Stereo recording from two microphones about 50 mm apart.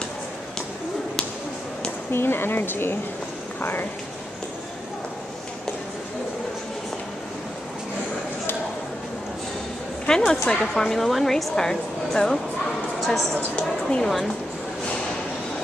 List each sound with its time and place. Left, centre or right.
2.1 s speech: left
10.0 s a woman's voice: centre
13.7 s speech: centre